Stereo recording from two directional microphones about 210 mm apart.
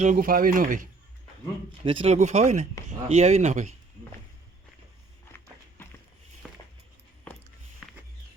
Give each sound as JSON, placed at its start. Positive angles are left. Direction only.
{"t": 0.0, "sound": "speech", "side_deg": -40}
{"t": 1.8, "sound": "speech", "side_deg": -25}
{"t": 5.3, "sound": "walk", "side_deg": 10}
{"t": 6.4, "sound": "a sound", "side_deg": 0}